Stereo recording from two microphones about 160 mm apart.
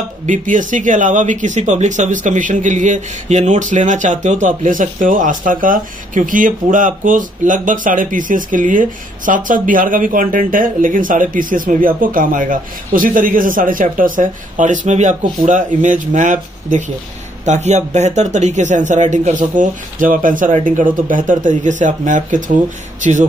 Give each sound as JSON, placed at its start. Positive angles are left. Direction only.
{"t": 0.3, "sound": "speech", "side_deg": -55}